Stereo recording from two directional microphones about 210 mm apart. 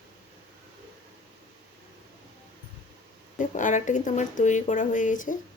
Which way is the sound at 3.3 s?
40° left (ahead or behind).